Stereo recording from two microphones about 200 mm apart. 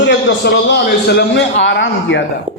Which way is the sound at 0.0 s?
60° left (ahead or behind).